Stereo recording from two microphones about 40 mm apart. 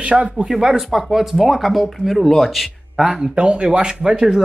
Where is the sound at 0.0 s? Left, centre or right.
Right.